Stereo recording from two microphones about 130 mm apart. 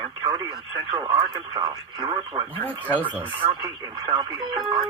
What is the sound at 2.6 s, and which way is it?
Speech, 10° left (ahead or behind).